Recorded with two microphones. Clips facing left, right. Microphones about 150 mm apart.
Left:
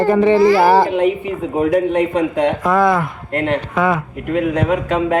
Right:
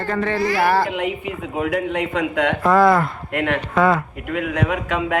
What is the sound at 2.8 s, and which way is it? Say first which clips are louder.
Speech: right 1 dB; 20° left (ahead or behind).